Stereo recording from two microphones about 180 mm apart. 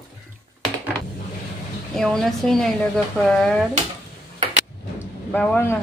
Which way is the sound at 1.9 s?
Centre (ahead or behind).